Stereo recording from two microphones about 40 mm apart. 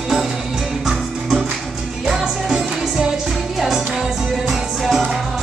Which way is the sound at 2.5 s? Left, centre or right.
Centre.